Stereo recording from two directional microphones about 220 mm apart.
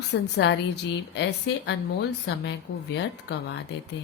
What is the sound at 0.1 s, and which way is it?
A woman's voice, 50° left (ahead or behind).